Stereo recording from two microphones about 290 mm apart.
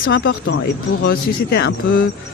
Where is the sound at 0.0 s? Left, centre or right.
Left.